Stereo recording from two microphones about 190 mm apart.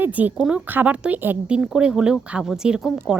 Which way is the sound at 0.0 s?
10° right (ahead or behind).